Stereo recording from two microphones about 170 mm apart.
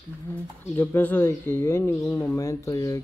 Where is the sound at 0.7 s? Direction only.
10° left (ahead or behind).